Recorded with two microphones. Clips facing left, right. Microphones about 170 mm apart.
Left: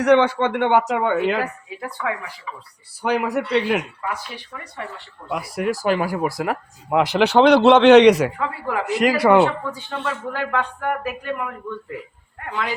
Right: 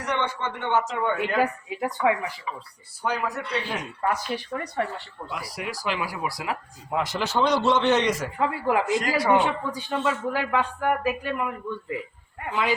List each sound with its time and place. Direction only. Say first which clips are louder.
0.0 s a man's voice: left 12 dB; 75° left (ahead or behind)
1.8 s speech: right 4 dB; 20° right (ahead or behind)
3.0 s speech: left 7 dB; 70° left (ahead or behind)
4.1 s speech: right 4 dB; 40° right (ahead or behind)
5.3 s speech: left 10 dB; 55° left (ahead or behind); by 8.3 s 70° left (ahead or behind)
8.4 s speech: right 2 dB; 20° right (ahead or behind)
8.9 s a man's voice: left 11 dB; 65° left (ahead or behind)
9.7 s speech: right 2 dB; 10° right (ahead or behind)